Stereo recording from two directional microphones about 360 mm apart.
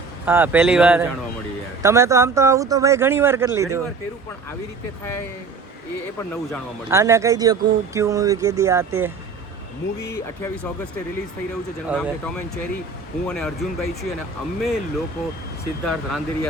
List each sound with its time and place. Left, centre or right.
0.3 s speech: centre
6.5 s speech: centre
10.0 s speech: centre
11.9 s speech: centre